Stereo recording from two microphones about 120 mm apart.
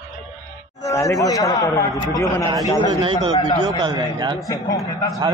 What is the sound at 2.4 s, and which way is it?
Speech, 30° right (ahead or behind).